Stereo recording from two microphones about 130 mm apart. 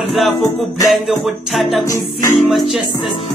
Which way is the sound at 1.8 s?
25° left (ahead or behind).